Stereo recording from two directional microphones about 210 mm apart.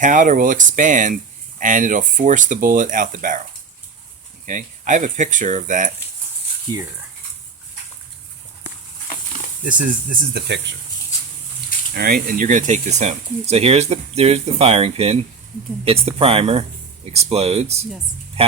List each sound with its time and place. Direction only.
0.0 s speech: 40° right (ahead or behind)
4.4 s speech: 35° right (ahead or behind)
6.7 s speech: 20° right (ahead or behind)
9.6 s speech: 40° right (ahead or behind)
11.9 s speech: 45° right (ahead or behind); by 17.8 s 30° right (ahead or behind)
18.4 s music: 30° right (ahead or behind)